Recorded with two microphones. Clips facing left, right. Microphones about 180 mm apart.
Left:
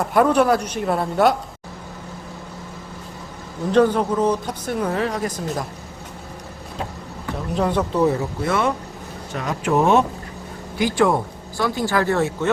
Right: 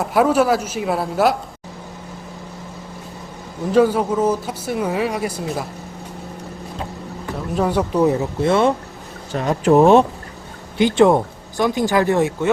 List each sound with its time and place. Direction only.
0.0 s speech: 5° right (ahead or behind)
3.7 s speech: 5° right (ahead or behind)
7.5 s speech: 10° right (ahead or behind)